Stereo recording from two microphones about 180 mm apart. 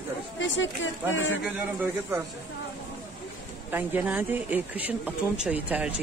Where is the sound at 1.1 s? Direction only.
90° left.